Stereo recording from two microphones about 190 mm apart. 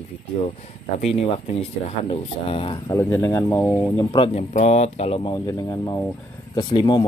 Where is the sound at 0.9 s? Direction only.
35° left (ahead or behind); by 4.0 s 10° left (ahead or behind).